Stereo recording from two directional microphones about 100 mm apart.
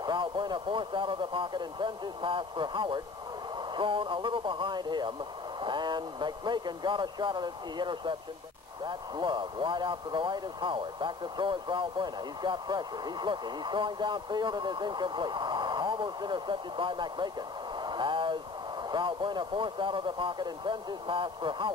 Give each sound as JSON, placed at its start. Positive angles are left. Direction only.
{"t": 0.0, "sound": "speech", "side_deg": -50}